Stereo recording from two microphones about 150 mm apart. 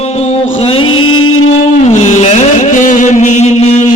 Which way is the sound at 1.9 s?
55° left (ahead or behind).